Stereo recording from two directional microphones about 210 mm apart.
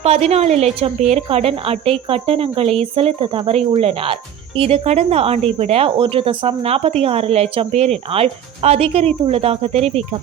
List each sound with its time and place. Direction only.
0.0 s speech: 30° right (ahead or behind)